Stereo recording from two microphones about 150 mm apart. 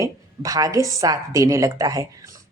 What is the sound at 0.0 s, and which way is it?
A woman's voice, 25° right (ahead or behind).